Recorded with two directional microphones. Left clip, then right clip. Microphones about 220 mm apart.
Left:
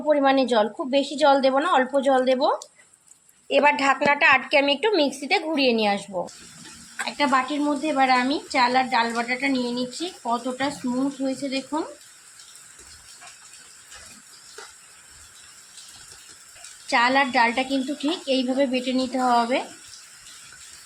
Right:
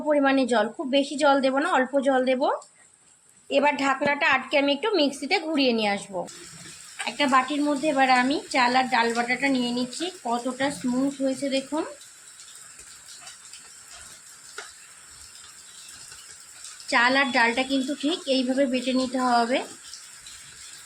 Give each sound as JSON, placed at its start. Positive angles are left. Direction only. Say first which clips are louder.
{"t": 0.1, "sound": "a woman's voice", "louder": "left 2 dB", "side_deg": 10}
{"t": 7.0, "sound": "a woman's voice", "louder": "even", "side_deg": 5}
{"t": 16.8, "sound": "a woman's voice", "louder": "left 1 dB", "side_deg": 5}